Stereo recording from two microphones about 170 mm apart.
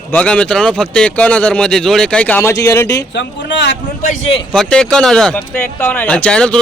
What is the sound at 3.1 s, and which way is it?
Speech, 90° left.